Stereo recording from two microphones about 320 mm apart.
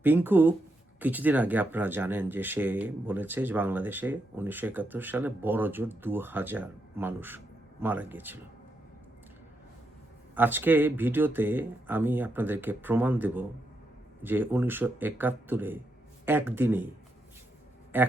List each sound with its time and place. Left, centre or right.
0.0 s speech: centre
10.3 s speech: centre
17.9 s speech: centre